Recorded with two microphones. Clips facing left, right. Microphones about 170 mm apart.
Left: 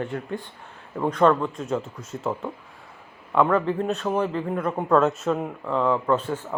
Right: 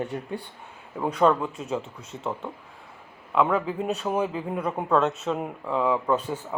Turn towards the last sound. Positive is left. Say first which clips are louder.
# left 2 dB
turn(degrees=-5)  # may be behind; listen again after turning